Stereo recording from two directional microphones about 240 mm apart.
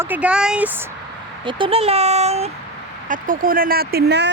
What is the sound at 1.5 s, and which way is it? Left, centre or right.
A child's voice, right.